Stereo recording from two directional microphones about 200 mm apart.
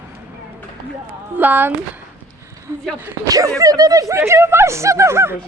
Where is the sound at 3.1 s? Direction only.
15° right (ahead or behind).